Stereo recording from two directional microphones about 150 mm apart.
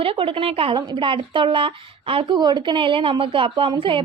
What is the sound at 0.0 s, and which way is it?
A woman's voice, 35° right (ahead or behind).